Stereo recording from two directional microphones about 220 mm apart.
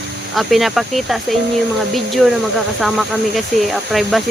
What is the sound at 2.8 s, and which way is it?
Speech, centre (ahead or behind).